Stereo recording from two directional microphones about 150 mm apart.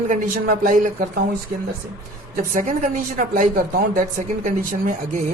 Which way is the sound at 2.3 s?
60° right (ahead or behind).